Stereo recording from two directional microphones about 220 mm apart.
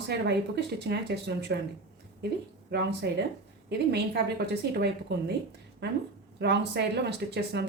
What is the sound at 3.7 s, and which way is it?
Speech, 50° right (ahead or behind).